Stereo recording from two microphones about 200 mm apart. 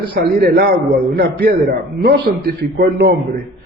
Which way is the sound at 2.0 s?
55° right (ahead or behind).